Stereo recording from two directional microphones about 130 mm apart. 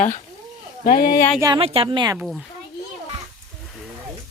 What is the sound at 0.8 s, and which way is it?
Speech, 90° left.